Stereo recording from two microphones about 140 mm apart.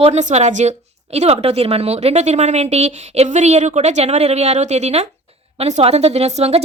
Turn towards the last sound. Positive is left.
turn(degrees=-50)  # may be behind; listen again after turning